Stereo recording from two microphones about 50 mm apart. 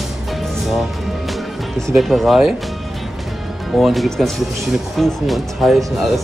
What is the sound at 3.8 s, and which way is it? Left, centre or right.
Speech, centre.